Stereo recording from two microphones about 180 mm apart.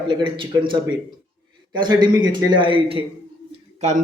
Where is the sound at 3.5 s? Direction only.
40° right (ahead or behind).